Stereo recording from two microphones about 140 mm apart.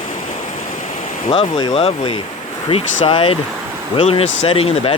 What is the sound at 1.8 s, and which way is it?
Speech, 40° left (ahead or behind).